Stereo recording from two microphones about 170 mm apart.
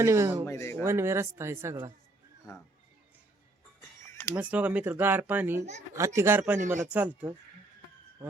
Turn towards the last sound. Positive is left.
turn(degrees=-10)  # may be behind; listen again after turning